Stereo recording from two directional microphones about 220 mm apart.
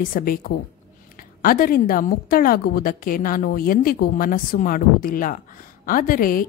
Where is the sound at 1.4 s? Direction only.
40° left (ahead or behind).